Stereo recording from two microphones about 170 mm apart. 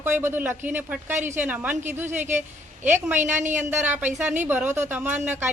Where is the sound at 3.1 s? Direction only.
45° right (ahead or behind).